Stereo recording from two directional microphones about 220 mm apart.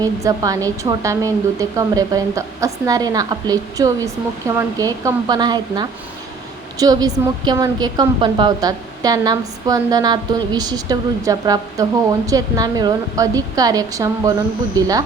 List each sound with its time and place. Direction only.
0.0 s a woman's voice: 15° right (ahead or behind)